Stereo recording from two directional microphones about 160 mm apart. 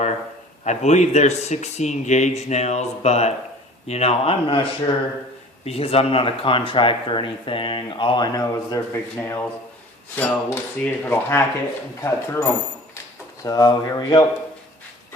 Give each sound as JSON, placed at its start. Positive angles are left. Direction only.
{"t": 0.6, "sound": "a man's voice", "side_deg": 45}
{"t": 5.6, "sound": "speech", "side_deg": 40}